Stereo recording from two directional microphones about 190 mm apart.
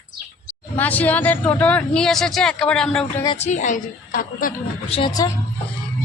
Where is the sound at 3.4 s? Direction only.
40° left (ahead or behind).